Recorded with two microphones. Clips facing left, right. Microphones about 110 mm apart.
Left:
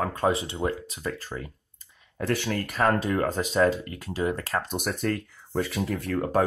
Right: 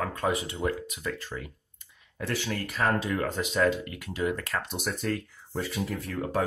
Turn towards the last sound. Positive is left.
turn(degrees=65)  # may be behind; listen again after turning